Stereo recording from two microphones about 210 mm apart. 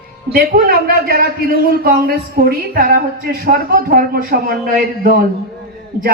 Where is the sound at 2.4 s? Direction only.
45° right (ahead or behind).